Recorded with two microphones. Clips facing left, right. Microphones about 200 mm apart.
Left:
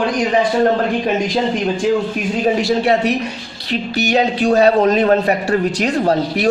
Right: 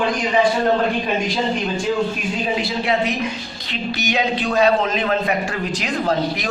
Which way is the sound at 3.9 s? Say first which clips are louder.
Left 5 dB; 40° left (ahead or behind).